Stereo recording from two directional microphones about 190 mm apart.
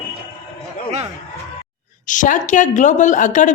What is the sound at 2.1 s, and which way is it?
A woman's voice, 40° left (ahead or behind).